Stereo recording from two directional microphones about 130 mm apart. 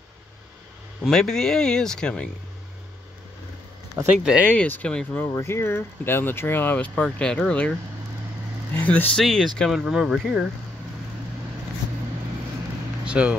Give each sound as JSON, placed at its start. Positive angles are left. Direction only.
{"t": 1.0, "sound": "speech", "side_deg": 0}
{"t": 3.9, "sound": "speech", "side_deg": -5}
{"t": 4.5, "sound": "speech", "side_deg": 10}
{"t": 5.3, "sound": "speech", "side_deg": 20}
{"t": 8.7, "sound": "speech", "side_deg": 10}
{"t": 9.2, "sound": "speech", "side_deg": 0}
{"t": 13.0, "sound": "speech", "side_deg": -10}